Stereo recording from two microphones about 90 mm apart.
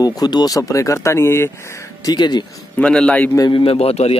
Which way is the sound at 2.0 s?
50° left (ahead or behind).